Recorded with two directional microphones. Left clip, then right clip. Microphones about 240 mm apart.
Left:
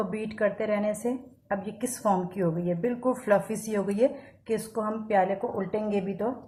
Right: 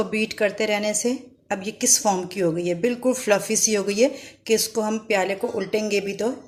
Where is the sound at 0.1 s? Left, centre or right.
Right.